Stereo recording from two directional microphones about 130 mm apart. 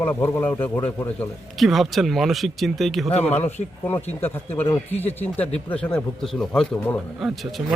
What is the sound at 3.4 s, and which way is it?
A man's voice, 15° left (ahead or behind).